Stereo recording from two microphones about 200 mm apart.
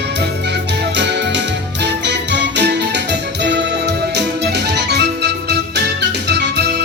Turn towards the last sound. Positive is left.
turn(degrees=-60)  # may be behind; listen again after turning